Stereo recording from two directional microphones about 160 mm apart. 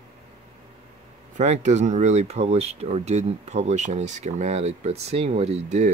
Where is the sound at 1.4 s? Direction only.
45° right (ahead or behind).